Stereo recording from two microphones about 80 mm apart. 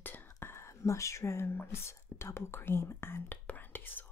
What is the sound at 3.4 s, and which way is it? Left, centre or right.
Whispering, left.